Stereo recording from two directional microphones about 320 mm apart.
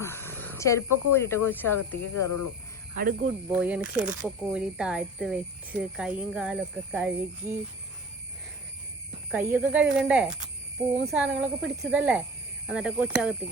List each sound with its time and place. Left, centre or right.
0.0 s wild animals: centre
1.5 s speech: centre
2.1 s speech: left
3.0 s speech: right
3.5 s speech: centre
9.3 s speech: centre